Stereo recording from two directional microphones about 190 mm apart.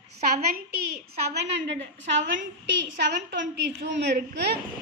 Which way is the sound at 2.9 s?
60° right (ahead or behind).